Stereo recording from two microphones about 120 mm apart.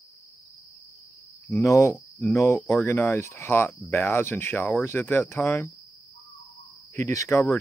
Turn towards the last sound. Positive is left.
turn(degrees=25)  # may be behind; listen again after turning